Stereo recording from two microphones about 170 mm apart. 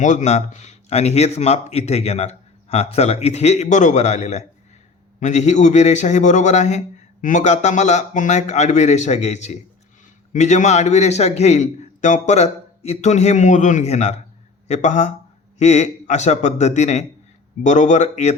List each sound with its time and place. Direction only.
0.0 s a man's voice: 45° left (ahead or behind)